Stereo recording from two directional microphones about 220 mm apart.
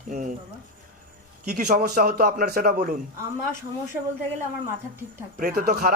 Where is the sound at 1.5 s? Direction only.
35° right (ahead or behind).